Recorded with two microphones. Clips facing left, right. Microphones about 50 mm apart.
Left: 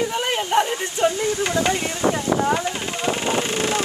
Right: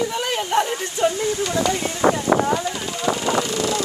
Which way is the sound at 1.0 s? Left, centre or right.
Left.